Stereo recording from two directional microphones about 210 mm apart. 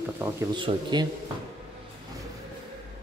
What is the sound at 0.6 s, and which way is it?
Speech, 20° right (ahead or behind).